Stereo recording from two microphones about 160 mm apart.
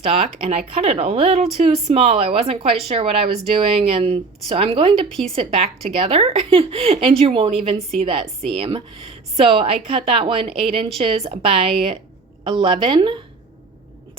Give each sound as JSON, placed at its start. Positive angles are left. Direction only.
{"t": 0.0, "sound": "speech", "side_deg": -35}
{"t": 5.0, "sound": "speech", "side_deg": 5}
{"t": 5.3, "sound": "speech", "side_deg": -35}